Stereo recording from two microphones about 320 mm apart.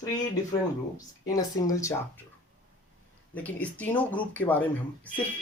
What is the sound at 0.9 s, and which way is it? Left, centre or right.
Speech, centre.